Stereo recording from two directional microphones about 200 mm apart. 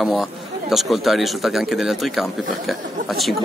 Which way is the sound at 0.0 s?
Centre (ahead or behind).